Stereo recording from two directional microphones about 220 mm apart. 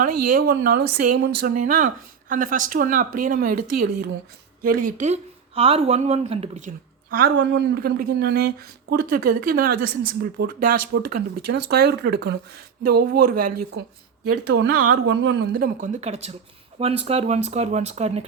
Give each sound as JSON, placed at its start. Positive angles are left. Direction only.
{"t": 0.0, "sound": "speech", "side_deg": -40}
{"t": 4.6, "sound": "a woman's voice", "side_deg": -40}